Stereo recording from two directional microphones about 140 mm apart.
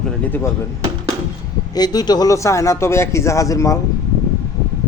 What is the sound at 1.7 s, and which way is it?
A man's voice, 30° left (ahead or behind).